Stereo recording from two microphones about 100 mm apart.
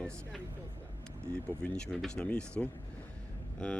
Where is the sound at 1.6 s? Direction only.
10° left (ahead or behind).